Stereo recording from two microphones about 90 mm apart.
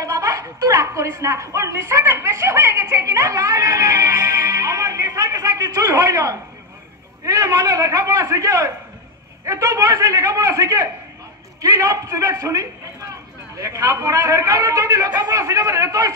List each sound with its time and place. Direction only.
0.0 s a woman's voice: 35° right (ahead or behind)